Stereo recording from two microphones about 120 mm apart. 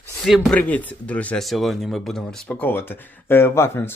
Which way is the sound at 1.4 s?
Centre (ahead or behind).